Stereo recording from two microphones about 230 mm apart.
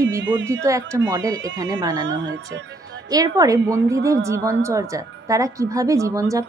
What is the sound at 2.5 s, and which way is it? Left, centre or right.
Speech, right.